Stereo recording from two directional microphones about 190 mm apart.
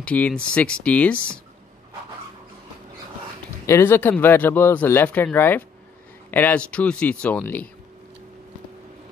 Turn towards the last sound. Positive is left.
turn(degrees=10)  # may be behind; listen again after turning